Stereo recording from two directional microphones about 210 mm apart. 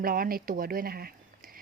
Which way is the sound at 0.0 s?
45° right (ahead or behind).